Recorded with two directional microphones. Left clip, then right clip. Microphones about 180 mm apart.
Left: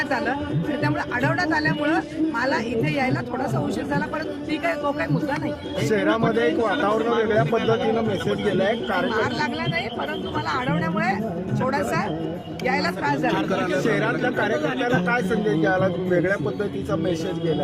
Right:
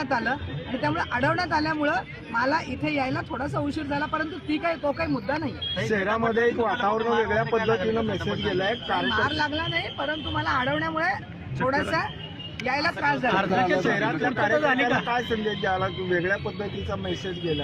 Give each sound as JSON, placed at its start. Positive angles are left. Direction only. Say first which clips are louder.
{"t": 1.6, "sound": "speech", "louder": "left 3 dB", "side_deg": 35}
{"t": 2.8, "sound": "speech", "louder": "left 3 dB", "side_deg": 10}
{"t": 5.9, "sound": "speech", "louder": "left 4 dB", "side_deg": 55}
{"t": 9.1, "sound": "speech", "louder": "left 1 dB", "side_deg": 15}
{"t": 13.8, "sound": "speech", "louder": "left 2 dB", "side_deg": 55}